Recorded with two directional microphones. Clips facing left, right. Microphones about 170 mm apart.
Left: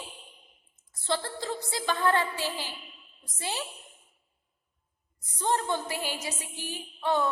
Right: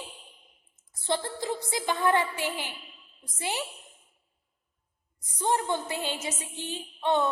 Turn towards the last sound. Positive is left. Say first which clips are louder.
# right 1 dB
turn(degrees=-25)  # may be behind; listen again after turning